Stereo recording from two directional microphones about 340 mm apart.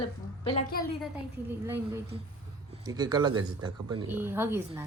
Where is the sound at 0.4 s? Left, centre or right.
Centre.